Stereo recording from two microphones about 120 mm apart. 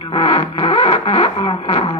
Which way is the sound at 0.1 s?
45° left (ahead or behind).